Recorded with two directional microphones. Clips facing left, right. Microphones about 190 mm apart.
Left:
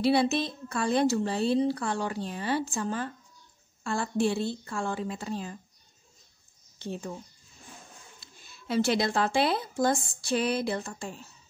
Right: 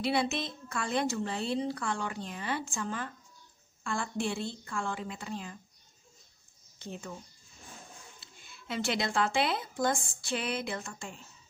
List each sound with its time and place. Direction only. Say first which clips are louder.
0.0 s speech: left 6 dB; 35° left (ahead or behind)
6.8 s speech: left 6 dB; 30° left (ahead or behind)
8.2 s speech: left 1 dB; 40° left (ahead or behind)